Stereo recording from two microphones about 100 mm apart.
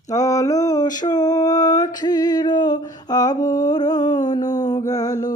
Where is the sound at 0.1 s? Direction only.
35° left (ahead or behind).